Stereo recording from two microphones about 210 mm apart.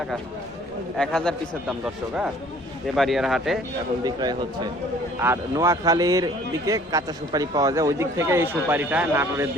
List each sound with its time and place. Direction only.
0.9 s a man's voice: 5° left (ahead or behind)
4.0 s a man's voice: 20° right (ahead or behind)